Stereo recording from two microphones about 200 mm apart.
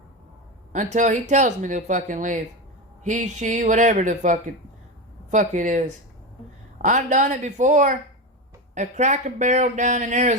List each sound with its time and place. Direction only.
0.7 s speech: 40° right (ahead or behind)
6.8 s speech: 40° right (ahead or behind)